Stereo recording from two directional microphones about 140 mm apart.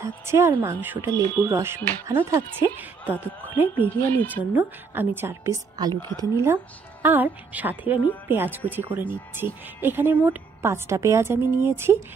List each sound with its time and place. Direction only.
0.0 s a woman's voice: 20° right (ahead or behind)
3.8 s speech: 10° left (ahead or behind)
4.5 s a woman's voice: 15° right (ahead or behind)